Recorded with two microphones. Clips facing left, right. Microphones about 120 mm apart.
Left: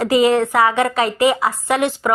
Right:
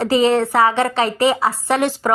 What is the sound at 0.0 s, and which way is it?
A woman's voice, 30° right (ahead or behind).